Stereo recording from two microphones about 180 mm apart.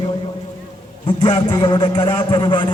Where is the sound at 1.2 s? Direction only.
20° left (ahead or behind).